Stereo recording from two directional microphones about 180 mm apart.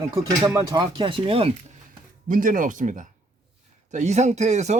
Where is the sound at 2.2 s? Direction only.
50° right (ahead or behind).